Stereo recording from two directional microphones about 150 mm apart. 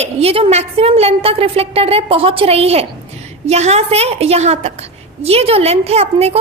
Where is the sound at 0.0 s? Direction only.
40° right (ahead or behind).